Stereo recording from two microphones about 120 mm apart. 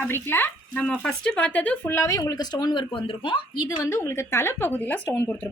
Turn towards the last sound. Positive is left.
turn(degrees=15)  # may be behind; listen again after turning